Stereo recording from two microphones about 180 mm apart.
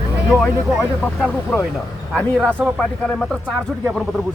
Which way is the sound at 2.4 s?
10° right (ahead or behind).